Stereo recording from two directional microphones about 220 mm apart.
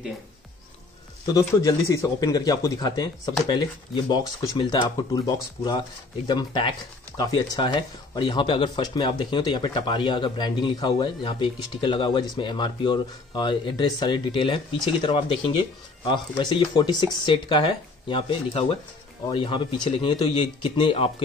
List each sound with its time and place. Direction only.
1.2 s speech: 15° left (ahead or behind)